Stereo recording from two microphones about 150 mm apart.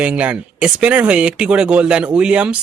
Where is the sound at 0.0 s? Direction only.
10° right (ahead or behind).